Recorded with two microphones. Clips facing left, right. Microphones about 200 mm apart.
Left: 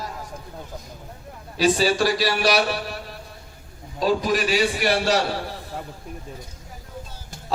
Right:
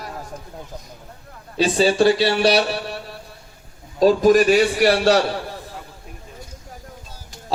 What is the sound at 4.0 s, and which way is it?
Speech, 45° right (ahead or behind).